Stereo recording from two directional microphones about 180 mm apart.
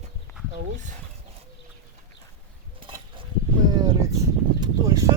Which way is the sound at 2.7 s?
30° right (ahead or behind).